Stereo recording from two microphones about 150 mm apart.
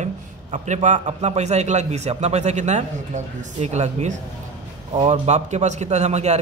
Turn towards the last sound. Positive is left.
turn(degrees=-50)  # may be behind; listen again after turning